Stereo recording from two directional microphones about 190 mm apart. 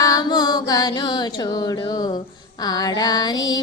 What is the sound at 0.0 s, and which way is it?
Music, 20° left (ahead or behind).